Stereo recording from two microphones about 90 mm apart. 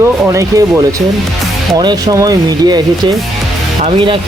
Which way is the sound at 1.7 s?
50° right (ahead or behind).